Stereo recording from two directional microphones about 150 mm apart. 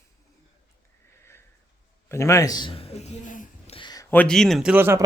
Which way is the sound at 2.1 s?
20° left (ahead or behind).